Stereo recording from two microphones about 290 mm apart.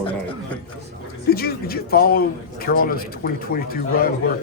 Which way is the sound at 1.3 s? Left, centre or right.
Left.